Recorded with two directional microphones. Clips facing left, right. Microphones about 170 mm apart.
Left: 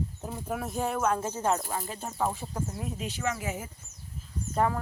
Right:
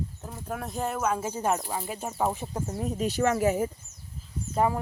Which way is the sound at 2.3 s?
20° right (ahead or behind).